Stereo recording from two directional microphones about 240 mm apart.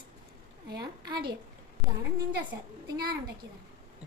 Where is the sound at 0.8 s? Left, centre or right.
Centre.